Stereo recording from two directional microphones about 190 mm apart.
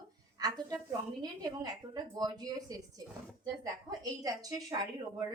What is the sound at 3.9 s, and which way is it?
Speech, 20° right (ahead or behind).